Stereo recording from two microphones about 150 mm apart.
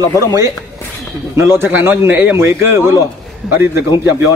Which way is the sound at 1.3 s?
15° right (ahead or behind).